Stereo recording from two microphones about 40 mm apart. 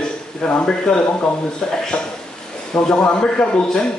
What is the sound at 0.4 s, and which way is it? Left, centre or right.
A man's voice, left.